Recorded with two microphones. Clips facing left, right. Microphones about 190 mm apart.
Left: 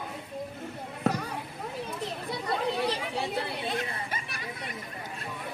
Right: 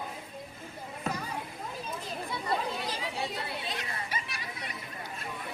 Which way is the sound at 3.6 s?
55° left (ahead or behind).